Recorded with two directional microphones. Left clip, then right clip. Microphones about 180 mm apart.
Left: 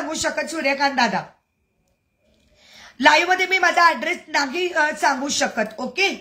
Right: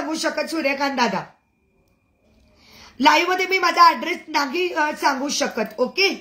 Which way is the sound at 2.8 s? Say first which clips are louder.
Left 1 dB; 15° left (ahead or behind).